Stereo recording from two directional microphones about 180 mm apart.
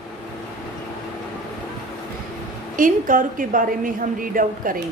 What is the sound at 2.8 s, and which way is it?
A woman's voice, 50° right (ahead or behind).